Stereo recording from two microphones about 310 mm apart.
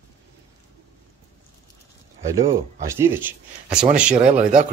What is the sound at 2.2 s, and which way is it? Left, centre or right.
Speech, centre.